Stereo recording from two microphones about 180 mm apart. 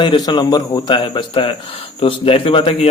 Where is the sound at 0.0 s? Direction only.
25° left (ahead or behind).